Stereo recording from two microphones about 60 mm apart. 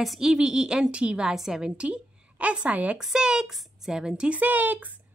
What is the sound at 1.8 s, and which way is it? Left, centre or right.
A woman's voice, centre.